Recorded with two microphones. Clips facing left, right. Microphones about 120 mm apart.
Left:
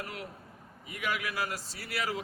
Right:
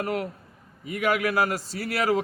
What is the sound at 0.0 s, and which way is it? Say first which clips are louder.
A man's voice: right 12 dB; 65° right (ahead or behind).